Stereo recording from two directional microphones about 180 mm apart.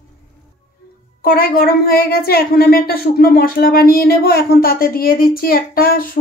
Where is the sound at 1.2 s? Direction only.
55° left (ahead or behind).